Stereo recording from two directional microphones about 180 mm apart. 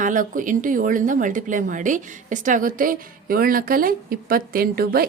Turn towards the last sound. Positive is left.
turn(degrees=-55)  # may be behind; listen again after turning